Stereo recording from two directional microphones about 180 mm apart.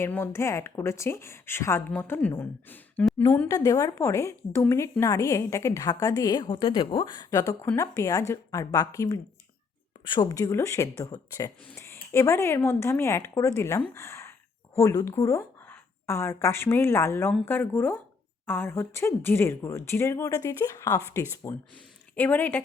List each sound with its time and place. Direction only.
0.0 s a woman's voice: 15° left (ahead or behind)
13.9 s a sound: 15° left (ahead or behind)
14.8 s a woman's voice: 15° left (ahead or behind)